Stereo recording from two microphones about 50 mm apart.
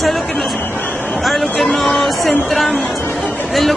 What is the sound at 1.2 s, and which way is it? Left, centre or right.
Speech, centre.